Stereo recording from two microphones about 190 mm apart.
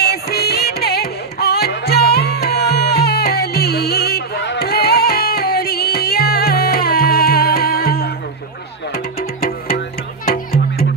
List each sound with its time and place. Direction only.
0.0 s music: 55° left (ahead or behind)